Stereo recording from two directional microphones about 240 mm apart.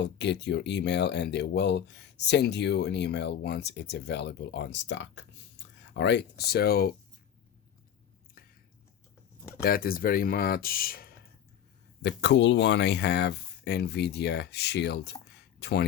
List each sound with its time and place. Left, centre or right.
0.0 s speech: left
8.4 s a sound: left
9.6 s speech: left